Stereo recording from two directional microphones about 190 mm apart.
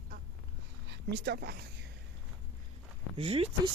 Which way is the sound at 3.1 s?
30° right (ahead or behind).